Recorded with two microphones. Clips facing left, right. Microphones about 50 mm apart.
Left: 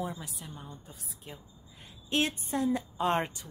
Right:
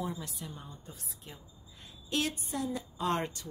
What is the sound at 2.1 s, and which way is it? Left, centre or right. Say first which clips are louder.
A woman's voice: left 3 dB; left.